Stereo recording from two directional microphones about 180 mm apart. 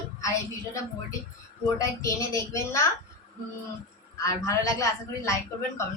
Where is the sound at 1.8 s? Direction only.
15° left (ahead or behind).